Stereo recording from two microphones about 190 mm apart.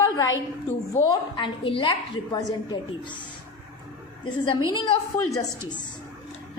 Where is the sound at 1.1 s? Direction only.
25° left (ahead or behind).